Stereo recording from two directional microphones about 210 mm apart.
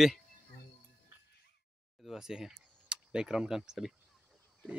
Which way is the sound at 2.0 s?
5° right (ahead or behind).